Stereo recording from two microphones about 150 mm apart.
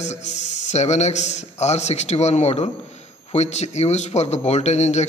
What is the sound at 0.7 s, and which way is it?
Speech, 50° left (ahead or behind).